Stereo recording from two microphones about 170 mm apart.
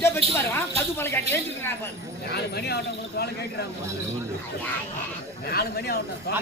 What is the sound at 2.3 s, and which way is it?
Speech, 70° left (ahead or behind).